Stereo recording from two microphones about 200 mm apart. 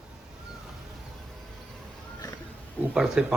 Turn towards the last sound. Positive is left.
turn(degrees=0)  # may be behind; listen again after turning